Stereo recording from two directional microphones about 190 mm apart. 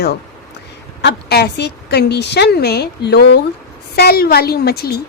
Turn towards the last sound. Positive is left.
turn(degrees=55)  # may be behind; listen again after turning